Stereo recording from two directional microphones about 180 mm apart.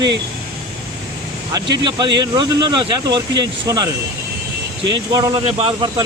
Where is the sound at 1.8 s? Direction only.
25° right (ahead or behind).